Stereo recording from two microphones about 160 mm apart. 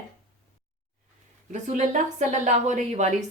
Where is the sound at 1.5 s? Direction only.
50° right (ahead or behind).